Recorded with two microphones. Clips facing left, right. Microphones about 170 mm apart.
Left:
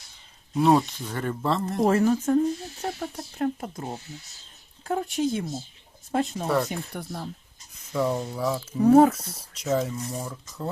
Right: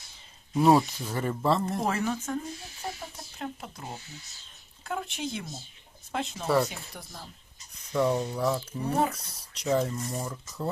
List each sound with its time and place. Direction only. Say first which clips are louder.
0.5 s speech: left 1 dB; 5° right (ahead or behind)
1.9 s speech: left 9 dB; 40° left (ahead or behind)
2.8 s speech: left 6 dB; 55° left (ahead or behind)
4.9 s speech: left 8 dB; 40° left (ahead or behind)
6.7 s speech: left 10 dB; 60° left (ahead or behind)
7.9 s speech: even; centre (ahead or behind)